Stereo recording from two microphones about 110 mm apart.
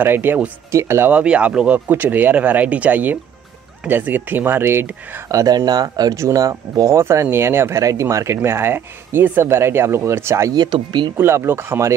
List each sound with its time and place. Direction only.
0.0 s speech: 20° right (ahead or behind)
1.1 s speech: 10° right (ahead or behind)
5.3 s speech: 30° right (ahead or behind)
10.5 s speech: 40° right (ahead or behind)
11.1 s speech: 20° right (ahead or behind)